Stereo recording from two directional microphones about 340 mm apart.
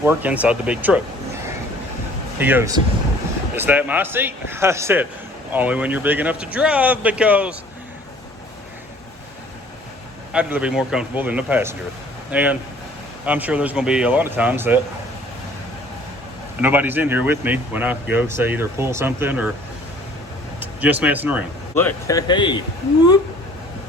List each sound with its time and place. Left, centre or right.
0.0 s speech: centre
2.4 s speech: centre
10.3 s speech: centre
16.6 s speech: centre
20.6 s speech: centre
21.8 s speech: centre